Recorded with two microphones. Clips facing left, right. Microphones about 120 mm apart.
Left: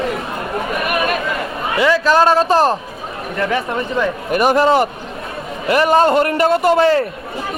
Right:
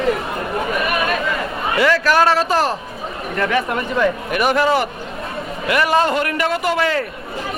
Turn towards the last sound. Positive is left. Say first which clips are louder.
# left 6 dB
turn(degrees=35)  # may be behind; listen again after turning